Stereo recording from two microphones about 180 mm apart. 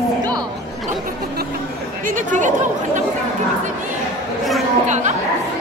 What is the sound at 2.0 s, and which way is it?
Chatter, 45° right (ahead or behind).